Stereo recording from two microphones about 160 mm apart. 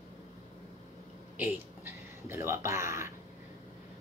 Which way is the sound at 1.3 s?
10° right (ahead or behind).